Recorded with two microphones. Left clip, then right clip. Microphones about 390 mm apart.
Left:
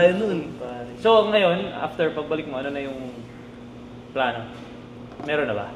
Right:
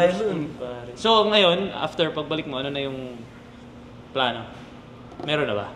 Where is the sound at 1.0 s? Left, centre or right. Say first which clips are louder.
Left 1 dB; right.